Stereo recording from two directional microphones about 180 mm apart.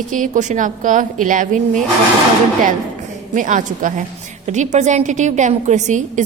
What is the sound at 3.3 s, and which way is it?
A woman's voice, 45° right (ahead or behind).